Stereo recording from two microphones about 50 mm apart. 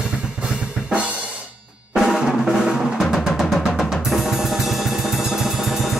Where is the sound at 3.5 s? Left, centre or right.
Centre.